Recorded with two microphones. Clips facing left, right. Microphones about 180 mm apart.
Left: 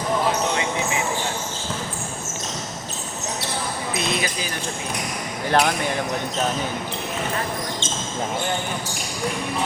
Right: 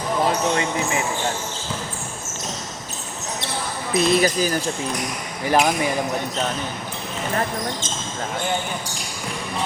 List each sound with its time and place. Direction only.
3.9 s speech: 40° right (ahead or behind)
5.5 s speech: 10° right (ahead or behind)